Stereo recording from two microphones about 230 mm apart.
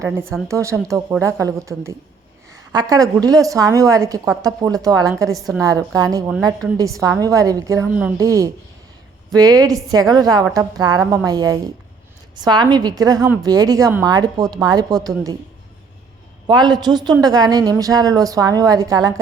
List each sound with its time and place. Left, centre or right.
0.4 s a woman's voice: centre
16.5 s a woman's voice: centre